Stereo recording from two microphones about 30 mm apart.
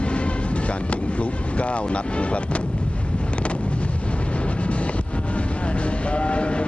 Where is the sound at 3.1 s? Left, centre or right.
Left.